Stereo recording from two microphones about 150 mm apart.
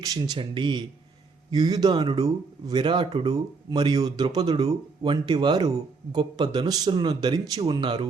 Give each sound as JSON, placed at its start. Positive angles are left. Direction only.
{"t": 0.3, "sound": "speech", "side_deg": -30}